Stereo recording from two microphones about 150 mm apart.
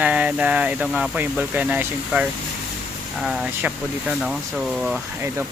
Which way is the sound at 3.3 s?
5° right (ahead or behind).